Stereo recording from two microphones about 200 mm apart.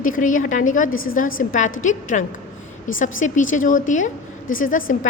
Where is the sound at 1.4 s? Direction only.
40° left (ahead or behind).